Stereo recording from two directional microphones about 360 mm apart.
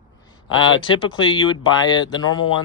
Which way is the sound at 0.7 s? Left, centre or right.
Centre.